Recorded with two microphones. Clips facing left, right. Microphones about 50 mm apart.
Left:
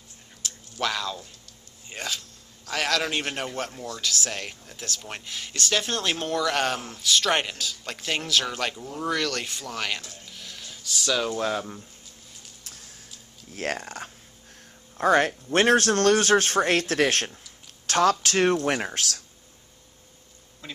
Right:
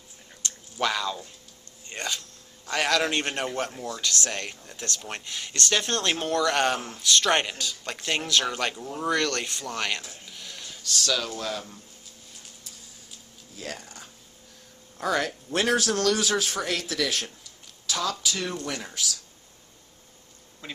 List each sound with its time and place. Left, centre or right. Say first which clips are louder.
0.4 s a sound: right 1 dB; centre
1.9 s a man's voice: right 1 dB; centre; by 11.8 s left
13.5 s speech: left 8 dB; left
15.0 s a man's voice: left 6 dB; left
20.6 s speech: right 1 dB; centre